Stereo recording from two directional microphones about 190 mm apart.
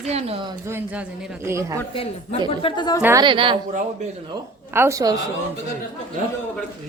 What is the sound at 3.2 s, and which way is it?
Speech, 25° right (ahead or behind).